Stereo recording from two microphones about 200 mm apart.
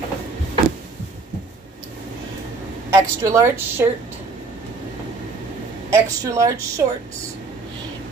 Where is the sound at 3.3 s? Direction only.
15° right (ahead or behind).